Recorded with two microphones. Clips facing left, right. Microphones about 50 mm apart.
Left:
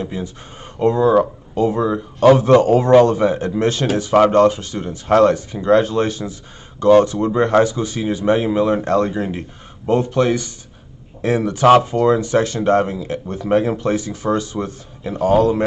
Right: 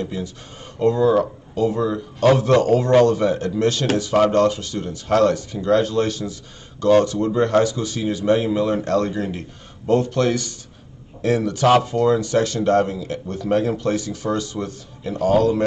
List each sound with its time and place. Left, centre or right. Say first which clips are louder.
0.0 s speech: left 2 dB; left